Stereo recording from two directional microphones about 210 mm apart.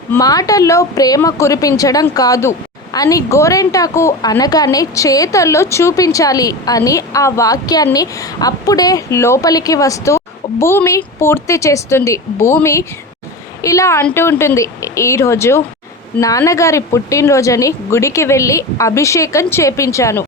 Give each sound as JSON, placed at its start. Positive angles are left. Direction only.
{"t": 0.1, "sound": "a woman's voice", "side_deg": 15}